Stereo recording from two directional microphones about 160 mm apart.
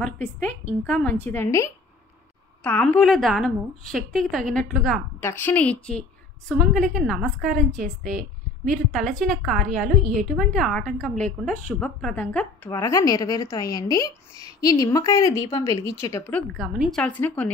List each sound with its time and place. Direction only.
0.0 s a woman's voice: 10° left (ahead or behind)
5.2 s a woman's voice: 10° left (ahead or behind)
12.7 s a woman's voice: 20° left (ahead or behind)
16.6 s a woman's voice: centre (ahead or behind)